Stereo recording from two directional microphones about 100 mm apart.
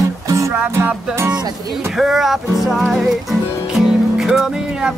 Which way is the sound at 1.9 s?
5° right (ahead or behind).